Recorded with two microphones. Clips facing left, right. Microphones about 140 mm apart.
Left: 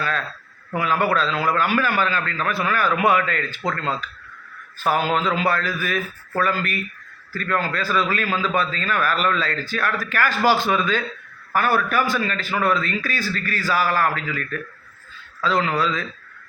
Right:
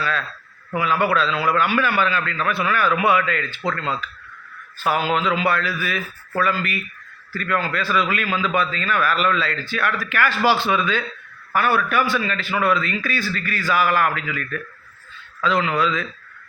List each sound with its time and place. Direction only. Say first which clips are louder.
0.8 s a man's voice: right 1 dB; 40° left (ahead or behind)